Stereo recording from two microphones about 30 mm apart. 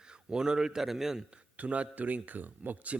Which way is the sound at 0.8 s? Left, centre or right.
Centre.